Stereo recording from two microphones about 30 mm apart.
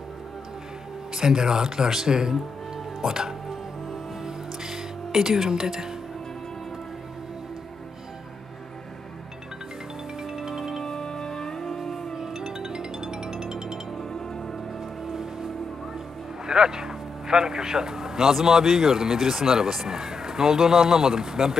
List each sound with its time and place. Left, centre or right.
1.1 s speech: centre
2.7 s music: centre
10.2 s music: centre
10.8 s music: left
12.1 s music: centre
14.0 s music: left
14.7 s music: centre
15.1 s music: centre
16.5 s speech: right